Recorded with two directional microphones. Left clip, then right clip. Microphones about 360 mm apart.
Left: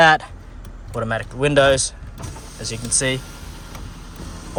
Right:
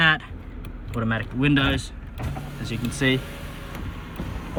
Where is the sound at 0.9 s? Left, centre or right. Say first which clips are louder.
Left 4 dB; centre.